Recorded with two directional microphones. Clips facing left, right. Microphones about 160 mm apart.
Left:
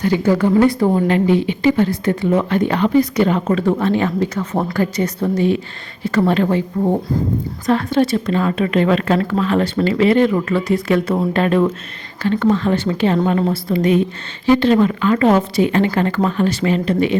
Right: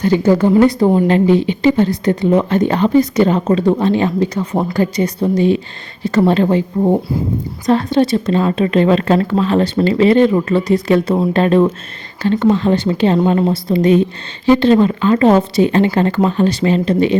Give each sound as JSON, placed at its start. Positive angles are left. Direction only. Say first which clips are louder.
{"t": 0.2, "sound": "a woman's voice", "louder": "right 3 dB", "side_deg": -25}
{"t": 6.0, "sound": "speech", "louder": "right 3 dB", "side_deg": -25}
{"t": 10.7, "sound": "speech", "louder": "right 3 dB", "side_deg": -35}
{"t": 11.1, "sound": "speech", "louder": "right 3 dB", "side_deg": -25}